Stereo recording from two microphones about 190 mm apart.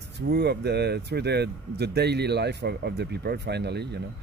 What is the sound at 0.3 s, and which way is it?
Speech, 60° right (ahead or behind).